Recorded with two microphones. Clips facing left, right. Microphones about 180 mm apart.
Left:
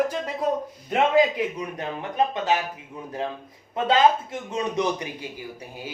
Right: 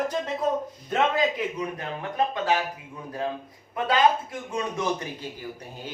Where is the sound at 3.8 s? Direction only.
25° left (ahead or behind).